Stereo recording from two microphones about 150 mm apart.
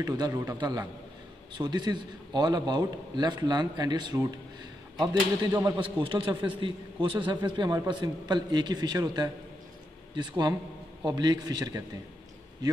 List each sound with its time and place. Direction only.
0.0 s a man's voice: 25° right (ahead or behind)
5.8 s a man's voice: 35° right (ahead or behind)